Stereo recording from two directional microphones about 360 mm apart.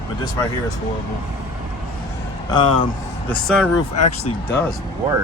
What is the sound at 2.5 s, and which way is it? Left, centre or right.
Speech, centre.